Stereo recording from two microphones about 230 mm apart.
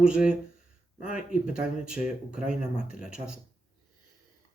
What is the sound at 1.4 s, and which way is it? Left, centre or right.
Speech, centre.